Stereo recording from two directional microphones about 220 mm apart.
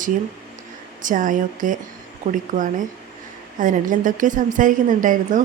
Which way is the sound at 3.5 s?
35° right (ahead or behind).